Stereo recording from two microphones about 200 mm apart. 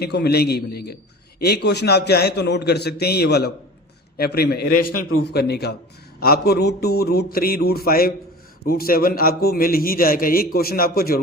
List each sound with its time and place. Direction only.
0.0 s a man's voice: 55° left (ahead or behind)